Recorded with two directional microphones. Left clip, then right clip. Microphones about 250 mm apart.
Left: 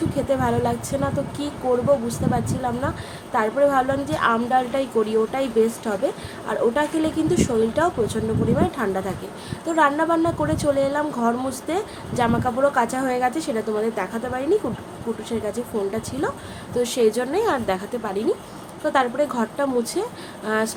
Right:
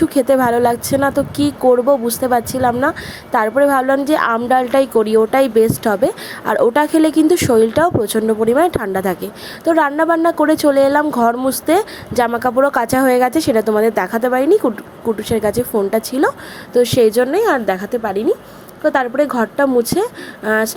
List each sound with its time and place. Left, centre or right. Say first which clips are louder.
0.1 s a woman's voice: right 9 dB; right